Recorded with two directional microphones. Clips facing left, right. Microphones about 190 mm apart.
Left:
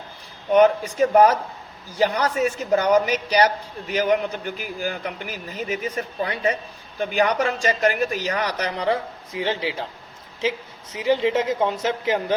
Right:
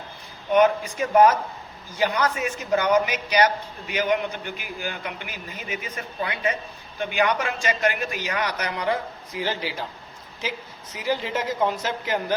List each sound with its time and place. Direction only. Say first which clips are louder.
0.5 s a man's voice: left 3 dB; 40° left (ahead or behind)
10.9 s speech: left 6 dB; 25° left (ahead or behind)